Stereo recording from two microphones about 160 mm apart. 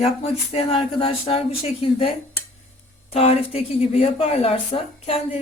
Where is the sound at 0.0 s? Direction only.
40° left (ahead or behind).